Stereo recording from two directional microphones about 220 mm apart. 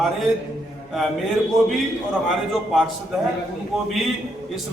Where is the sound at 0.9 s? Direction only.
Centre (ahead or behind).